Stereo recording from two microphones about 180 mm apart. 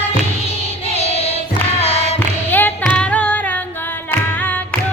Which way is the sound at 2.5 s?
10° left (ahead or behind).